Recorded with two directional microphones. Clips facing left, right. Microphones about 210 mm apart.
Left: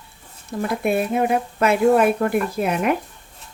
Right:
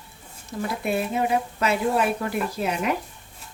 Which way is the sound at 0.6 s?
55° left (ahead or behind).